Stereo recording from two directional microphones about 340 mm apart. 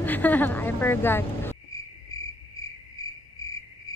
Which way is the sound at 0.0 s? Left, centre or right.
Centre.